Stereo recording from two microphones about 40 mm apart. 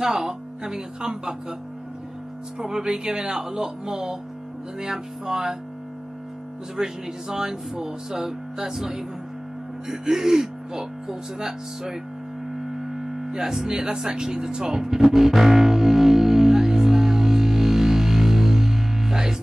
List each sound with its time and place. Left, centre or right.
0.0 s speech: centre
2.6 s speech: centre
6.8 s speech: centre
12.5 s a sound: centre
13.9 s speech: centre
15.0 s music: centre